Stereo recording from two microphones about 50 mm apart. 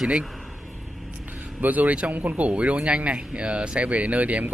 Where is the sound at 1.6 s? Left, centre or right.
Right.